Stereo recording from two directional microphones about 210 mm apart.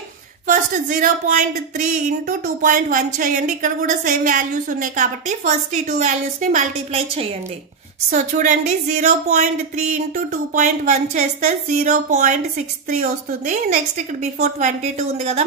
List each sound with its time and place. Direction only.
0.5 s speech: 40° right (ahead or behind)